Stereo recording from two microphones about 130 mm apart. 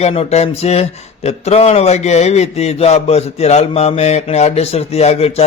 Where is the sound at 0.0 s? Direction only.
50° left (ahead or behind).